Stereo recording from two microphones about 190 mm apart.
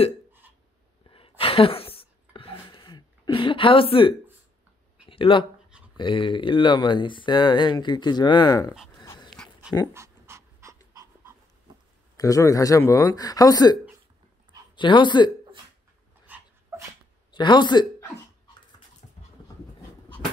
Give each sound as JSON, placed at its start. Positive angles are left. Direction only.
{"t": 1.1, "sound": "a sound", "side_deg": 30}
{"t": 5.9, "sound": "speech", "side_deg": 25}
{"t": 9.0, "sound": "dog", "side_deg": 25}
{"t": 9.9, "sound": "dog", "side_deg": -15}
{"t": 12.2, "sound": "speech", "side_deg": 15}
{"t": 14.8, "sound": "speech", "side_deg": 25}
{"t": 16.3, "sound": "dog", "side_deg": -10}
{"t": 17.3, "sound": "speech", "side_deg": 25}